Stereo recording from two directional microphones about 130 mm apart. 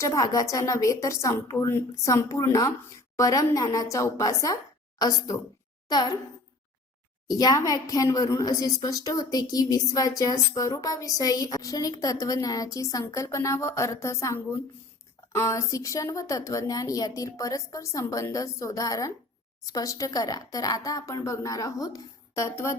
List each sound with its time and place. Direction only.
0.0 s a woman's voice: 25° left (ahead or behind)
7.3 s a woman's voice: 30° left (ahead or behind)